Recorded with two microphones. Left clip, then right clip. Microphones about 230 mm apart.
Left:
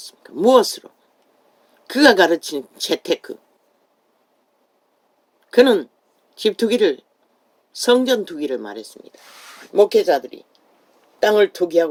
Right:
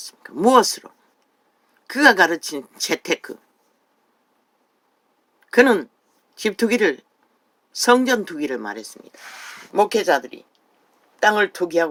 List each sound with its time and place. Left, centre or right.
0.0 s speech: right
5.5 s speech: right